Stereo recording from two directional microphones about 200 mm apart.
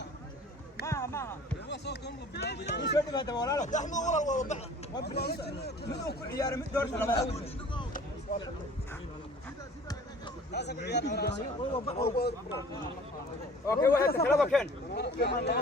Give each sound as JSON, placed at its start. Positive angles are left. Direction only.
{"t": 0.9, "sound": "basketball bounce", "side_deg": 15}
{"t": 1.6, "sound": "speech", "side_deg": 60}
{"t": 3.1, "sound": "speech", "side_deg": 20}
{"t": 3.6, "sound": "speech", "side_deg": 35}
{"t": 5.0, "sound": "speech", "side_deg": 55}
{"t": 6.3, "sound": "a man's voice", "side_deg": 15}
{"t": 7.3, "sound": "speech", "side_deg": 25}
{"t": 10.5, "sound": "speech", "side_deg": 55}
{"t": 11.9, "sound": "speech", "side_deg": 30}
{"t": 13.7, "sound": "a man's voice", "side_deg": 15}
{"t": 14.3, "sound": "speech", "side_deg": 0}
{"t": 14.9, "sound": "speech", "side_deg": 55}